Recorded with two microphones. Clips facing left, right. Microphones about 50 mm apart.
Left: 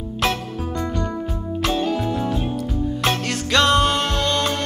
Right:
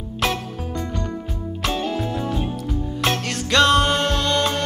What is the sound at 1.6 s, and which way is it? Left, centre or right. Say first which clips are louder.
Music: left 2 dB; centre.